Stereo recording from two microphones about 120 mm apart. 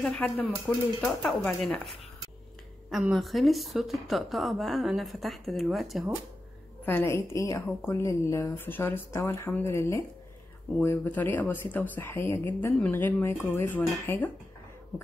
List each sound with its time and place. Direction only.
0.0 s speech: 10° left (ahead or behind)
2.9 s speech: centre (ahead or behind)
6.9 s a woman's voice: 20° left (ahead or behind)